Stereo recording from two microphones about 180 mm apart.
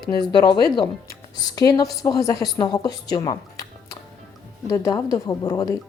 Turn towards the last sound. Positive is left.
turn(degrees=20)  # may be behind; listen again after turning